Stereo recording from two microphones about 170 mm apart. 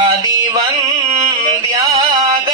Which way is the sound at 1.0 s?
35° right (ahead or behind).